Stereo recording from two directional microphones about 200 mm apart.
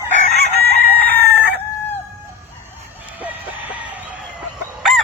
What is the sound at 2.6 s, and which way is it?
Chicken, 10° right (ahead or behind).